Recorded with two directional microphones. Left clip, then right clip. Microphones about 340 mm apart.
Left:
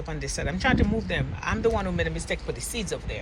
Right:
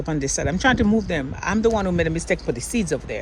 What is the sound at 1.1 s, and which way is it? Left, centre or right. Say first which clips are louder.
Speech: right 5 dB; centre.